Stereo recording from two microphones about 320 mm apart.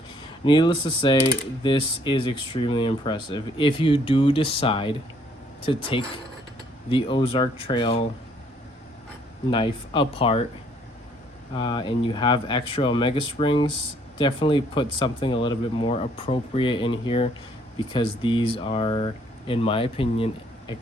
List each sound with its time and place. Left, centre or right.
0.4 s speech: centre
9.5 s speech: centre
11.5 s speech: centre